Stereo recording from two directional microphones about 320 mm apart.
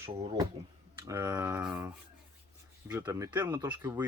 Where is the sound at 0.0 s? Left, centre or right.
Centre.